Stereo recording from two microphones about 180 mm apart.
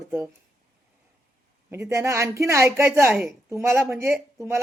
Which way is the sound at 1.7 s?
15° right (ahead or behind).